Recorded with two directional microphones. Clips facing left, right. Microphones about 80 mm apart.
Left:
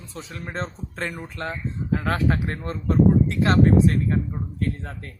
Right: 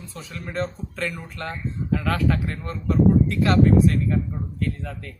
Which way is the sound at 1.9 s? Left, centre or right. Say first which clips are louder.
Even; left.